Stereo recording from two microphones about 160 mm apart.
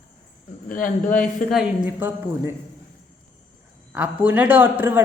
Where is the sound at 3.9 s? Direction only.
10° right (ahead or behind).